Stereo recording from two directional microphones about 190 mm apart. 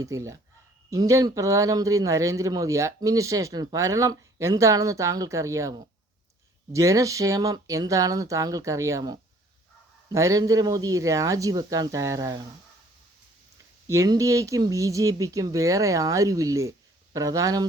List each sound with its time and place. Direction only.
0.0 s speech: 15° right (ahead or behind)
13.8 s speech: 15° right (ahead or behind)